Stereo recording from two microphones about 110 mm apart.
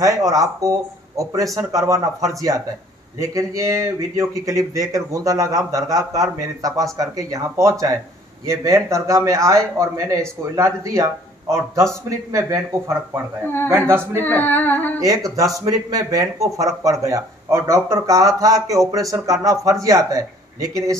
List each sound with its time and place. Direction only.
0.0 s speech: 30° right (ahead or behind)
14.2 s singing: 15° left (ahead or behind)
15.0 s speech: 30° right (ahead or behind)